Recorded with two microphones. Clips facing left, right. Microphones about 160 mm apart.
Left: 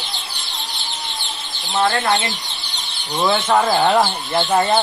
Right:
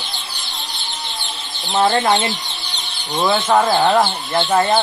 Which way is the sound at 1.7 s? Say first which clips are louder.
Right 3 dB; 20° right (ahead or behind).